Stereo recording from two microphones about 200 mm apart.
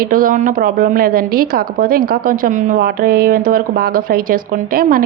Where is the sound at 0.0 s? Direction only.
45° right (ahead or behind).